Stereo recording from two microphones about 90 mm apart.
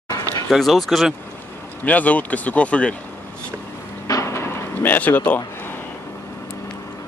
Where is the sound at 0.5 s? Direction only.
Centre (ahead or behind).